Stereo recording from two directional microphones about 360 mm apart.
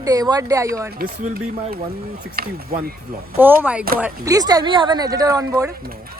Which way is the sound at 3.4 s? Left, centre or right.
Centre.